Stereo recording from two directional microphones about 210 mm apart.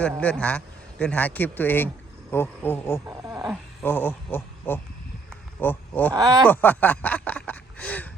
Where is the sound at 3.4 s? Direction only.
5° right (ahead or behind).